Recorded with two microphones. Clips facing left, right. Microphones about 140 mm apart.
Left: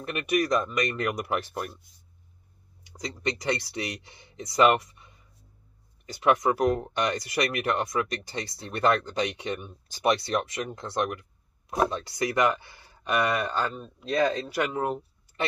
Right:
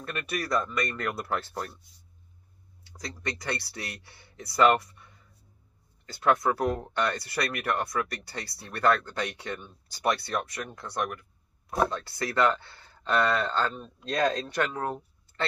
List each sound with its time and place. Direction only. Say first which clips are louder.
0.0 s speech: left 7 dB; 15° left (ahead or behind)
2.8 s speech: left 5 dB; 15° left (ahead or behind)
14.7 s a sound: left 4 dB; 15° left (ahead or behind)